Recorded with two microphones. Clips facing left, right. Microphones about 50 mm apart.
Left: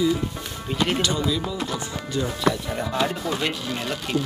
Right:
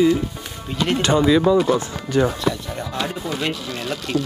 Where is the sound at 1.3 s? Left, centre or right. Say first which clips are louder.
Right 11 dB; right.